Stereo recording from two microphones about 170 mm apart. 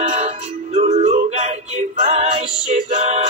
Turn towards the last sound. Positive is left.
turn(degrees=-45)  # may be behind; listen again after turning